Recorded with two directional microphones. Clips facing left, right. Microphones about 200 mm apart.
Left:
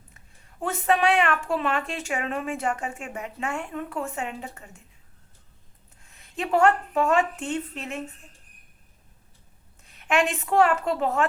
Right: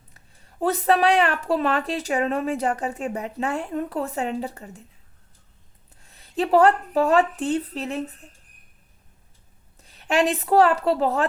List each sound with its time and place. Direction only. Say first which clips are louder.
0.6 s speech: right 3 dB; 35° right (ahead or behind)
6.0 s speech: right 7 dB; 35° right (ahead or behind)
9.8 s speech: right 3 dB; 35° right (ahead or behind)